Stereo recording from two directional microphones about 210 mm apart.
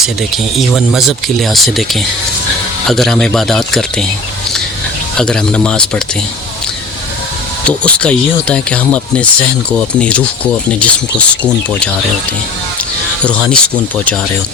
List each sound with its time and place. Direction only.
0.0 s speech: centre (ahead or behind)
5.1 s speech: 5° left (ahead or behind)
7.9 s speech: 5° left (ahead or behind)
13.2 s speech: 5° left (ahead or behind)